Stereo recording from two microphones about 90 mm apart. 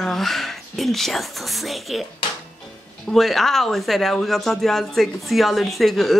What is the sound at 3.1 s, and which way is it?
Speech, centre (ahead or behind).